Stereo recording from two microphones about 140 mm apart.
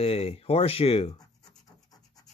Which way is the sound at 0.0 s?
45° left (ahead or behind).